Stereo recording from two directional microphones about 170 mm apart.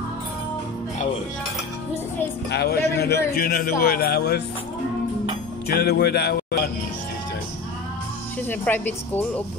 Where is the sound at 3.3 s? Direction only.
60° left (ahead or behind).